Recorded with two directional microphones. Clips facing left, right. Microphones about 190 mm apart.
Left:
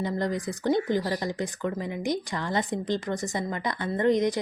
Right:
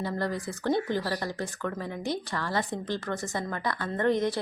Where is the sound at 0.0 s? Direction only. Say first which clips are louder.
Left 3 dB; 20° left (ahead or behind).